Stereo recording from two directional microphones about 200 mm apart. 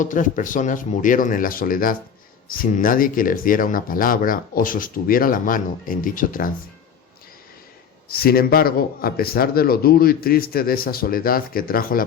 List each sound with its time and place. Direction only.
0.0 s speech: 40° left (ahead or behind)
8.1 s speech: 50° left (ahead or behind)